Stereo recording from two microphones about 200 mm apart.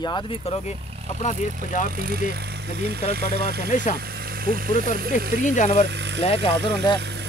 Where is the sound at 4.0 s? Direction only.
50° right (ahead or behind).